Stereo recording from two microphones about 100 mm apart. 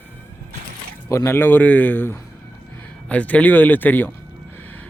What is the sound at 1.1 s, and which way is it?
Speech, 30° left (ahead or behind).